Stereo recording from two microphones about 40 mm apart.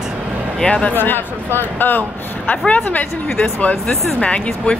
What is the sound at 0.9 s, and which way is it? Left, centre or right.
A man's voice, left.